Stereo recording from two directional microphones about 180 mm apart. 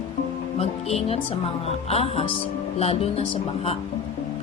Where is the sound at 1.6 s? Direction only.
35° left (ahead or behind).